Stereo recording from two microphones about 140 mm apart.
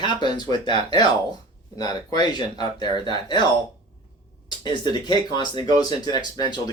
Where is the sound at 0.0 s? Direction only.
30° left (ahead or behind).